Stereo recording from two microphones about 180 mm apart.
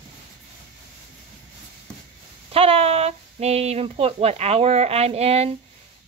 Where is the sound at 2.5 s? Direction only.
35° right (ahead or behind).